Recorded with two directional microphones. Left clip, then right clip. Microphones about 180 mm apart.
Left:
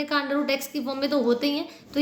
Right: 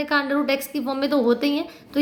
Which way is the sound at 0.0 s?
30° right (ahead or behind).